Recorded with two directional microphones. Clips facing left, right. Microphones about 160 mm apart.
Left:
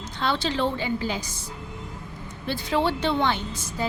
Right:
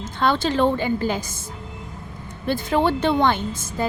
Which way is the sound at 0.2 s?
50° right (ahead or behind).